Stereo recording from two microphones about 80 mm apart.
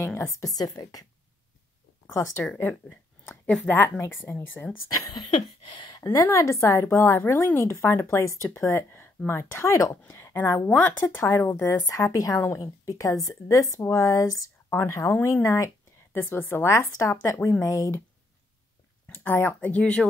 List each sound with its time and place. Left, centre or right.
0.2 s speech: left
2.4 s speech: left
4.0 s speech: left
5.1 s speech: left
6.1 s speech: left
7.2 s speech: left
9.7 s speech: left
10.7 s speech: left
16.1 s speech: left
17.0 s speech: left
19.1 s speech: left